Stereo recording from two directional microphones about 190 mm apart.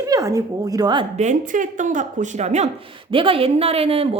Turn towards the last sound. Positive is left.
turn(degrees=-30)  # may be behind; listen again after turning